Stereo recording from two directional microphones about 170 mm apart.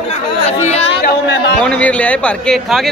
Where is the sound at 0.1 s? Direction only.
40° left (ahead or behind).